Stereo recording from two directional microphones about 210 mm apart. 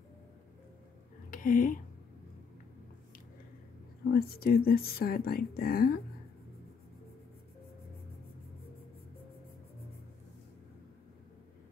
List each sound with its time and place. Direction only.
1.3 s speech: 40° left (ahead or behind)
4.1 s speech: 45° left (ahead or behind)